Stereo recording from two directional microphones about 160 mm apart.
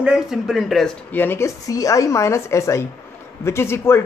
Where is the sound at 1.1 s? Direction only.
15° left (ahead or behind).